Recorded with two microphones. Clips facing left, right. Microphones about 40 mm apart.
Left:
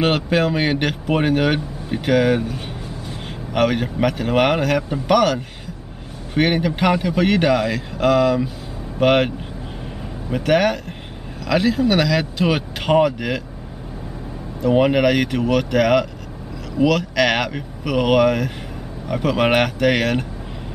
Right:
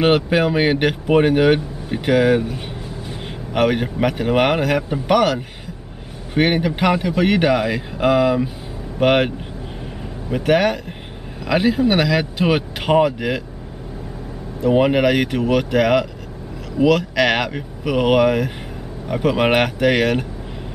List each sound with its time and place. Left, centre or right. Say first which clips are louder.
0.0 s speech: right 2 dB; centre
10.3 s a man's voice: right 1 dB; centre
11.4 s speech: right 1 dB; centre
14.6 s speech: even; centre